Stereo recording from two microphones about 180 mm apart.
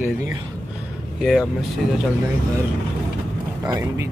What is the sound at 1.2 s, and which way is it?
Speech, centre (ahead or behind).